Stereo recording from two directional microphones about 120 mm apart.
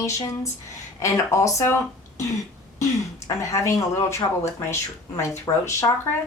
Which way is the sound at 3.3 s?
25° left (ahead or behind).